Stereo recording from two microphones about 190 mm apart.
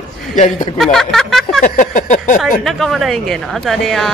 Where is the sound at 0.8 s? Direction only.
Centre (ahead or behind).